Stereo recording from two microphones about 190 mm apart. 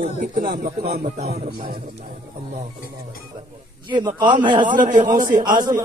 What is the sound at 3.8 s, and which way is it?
Speech, 25° right (ahead or behind).